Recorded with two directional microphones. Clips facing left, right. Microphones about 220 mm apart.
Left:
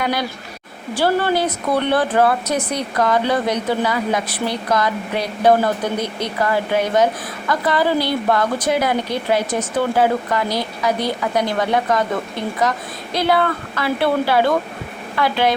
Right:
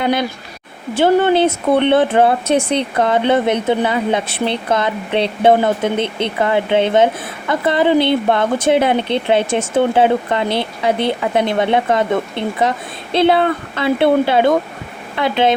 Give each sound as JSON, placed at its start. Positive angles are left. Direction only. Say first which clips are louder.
{"t": 0.0, "sound": "a woman's voice", "louder": "right 4 dB", "side_deg": -25}